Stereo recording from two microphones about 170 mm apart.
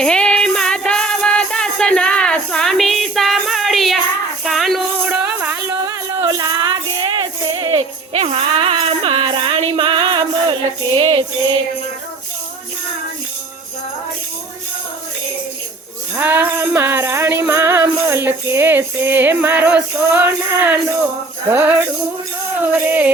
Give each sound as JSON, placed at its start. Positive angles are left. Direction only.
{"t": 0.0, "sound": "music", "side_deg": 5}
{"t": 5.8, "sound": "music", "side_deg": -25}
{"t": 16.1, "sound": "music", "side_deg": -10}